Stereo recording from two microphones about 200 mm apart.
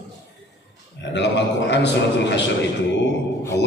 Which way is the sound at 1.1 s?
60° left (ahead or behind).